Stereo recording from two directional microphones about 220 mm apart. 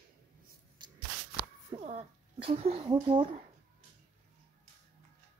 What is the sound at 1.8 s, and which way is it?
Speech, 30° right (ahead or behind).